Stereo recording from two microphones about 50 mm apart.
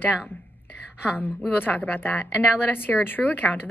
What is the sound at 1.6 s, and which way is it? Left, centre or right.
A woman's voice, left.